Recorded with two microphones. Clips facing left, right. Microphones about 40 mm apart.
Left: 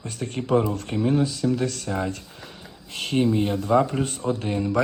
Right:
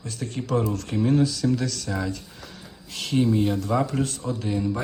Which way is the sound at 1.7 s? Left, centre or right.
Left.